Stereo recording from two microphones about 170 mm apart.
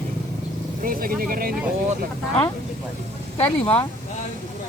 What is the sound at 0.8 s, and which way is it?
Speech, 60° right (ahead or behind).